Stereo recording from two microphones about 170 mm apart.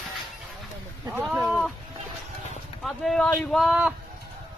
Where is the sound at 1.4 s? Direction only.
Centre (ahead or behind).